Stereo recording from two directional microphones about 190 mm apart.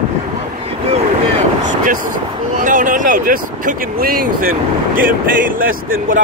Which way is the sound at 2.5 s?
40° right (ahead or behind).